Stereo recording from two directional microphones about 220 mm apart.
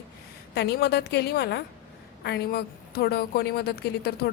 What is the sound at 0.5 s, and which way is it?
A woman's voice, 50° left (ahead or behind).